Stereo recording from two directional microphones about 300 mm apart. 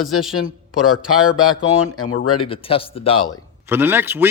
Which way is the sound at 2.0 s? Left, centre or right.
Left.